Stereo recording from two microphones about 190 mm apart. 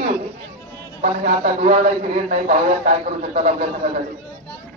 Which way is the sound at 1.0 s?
35° right (ahead or behind).